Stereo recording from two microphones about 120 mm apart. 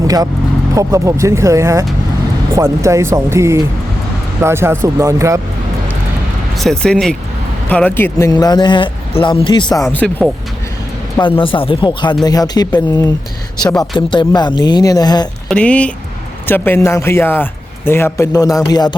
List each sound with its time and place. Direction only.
0.8 s speech: 25° right (ahead or behind)
6.6 s speech: 5° left (ahead or behind)
8.3 s speech: 35° left (ahead or behind)
9.9 s speech: 15° left (ahead or behind)
11.2 s speech: 45° left (ahead or behind)
15.4 s a man's voice: 10° left (ahead or behind); by 18.9 s 35° left (ahead or behind)